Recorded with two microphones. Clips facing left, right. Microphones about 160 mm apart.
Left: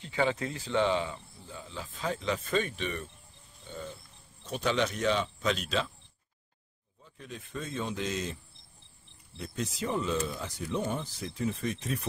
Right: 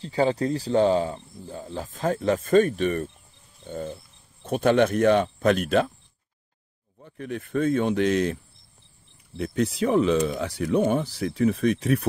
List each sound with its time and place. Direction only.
0.0 s speech: 35° right (ahead or behind)
3.6 s a sound: 50° right (ahead or behind)
4.5 s speech: 55° right (ahead or behind)
7.0 s speech: 60° right (ahead or behind)
9.4 s speech: 65° right (ahead or behind)